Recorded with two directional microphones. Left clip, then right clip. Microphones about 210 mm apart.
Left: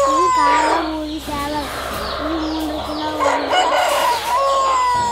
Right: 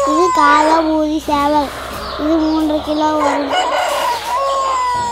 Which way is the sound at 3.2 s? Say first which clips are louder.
Right 1 dB; centre (ahead or behind).